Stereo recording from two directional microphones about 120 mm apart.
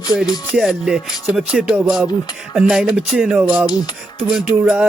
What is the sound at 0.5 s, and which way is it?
Music, 5° right (ahead or behind).